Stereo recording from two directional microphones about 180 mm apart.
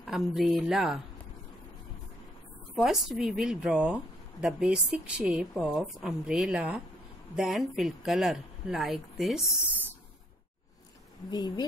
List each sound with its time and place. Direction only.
0.0 s a woman's voice: centre (ahead or behind)
2.7 s a woman's voice: centre (ahead or behind)
11.2 s speech: 25° left (ahead or behind)